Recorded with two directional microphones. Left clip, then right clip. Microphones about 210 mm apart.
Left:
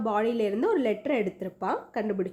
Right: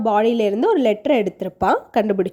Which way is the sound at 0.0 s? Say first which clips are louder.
Right 9 dB; 30° right (ahead or behind).